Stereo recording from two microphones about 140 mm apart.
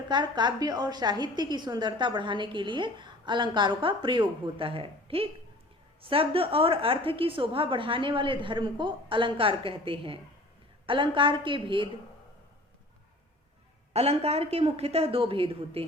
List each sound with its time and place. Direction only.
0.1 s a woman's voice: 30° right (ahead or behind)
13.9 s a woman's voice: 45° right (ahead or behind)